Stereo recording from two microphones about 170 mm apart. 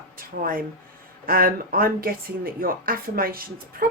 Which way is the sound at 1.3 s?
55° right (ahead or behind).